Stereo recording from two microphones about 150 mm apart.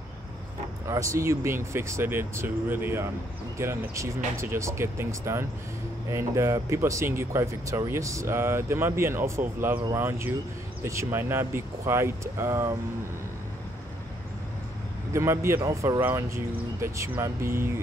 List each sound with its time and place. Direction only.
0.8 s speech: 20° right (ahead or behind)
15.1 s speech: 15° right (ahead or behind)